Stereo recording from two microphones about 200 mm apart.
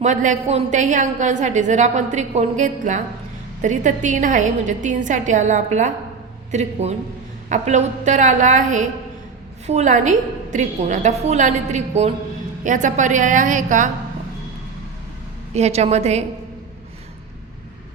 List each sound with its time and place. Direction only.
0.0 s a woman's voice: 40° right (ahead or behind)
15.5 s a woman's voice: 35° right (ahead or behind)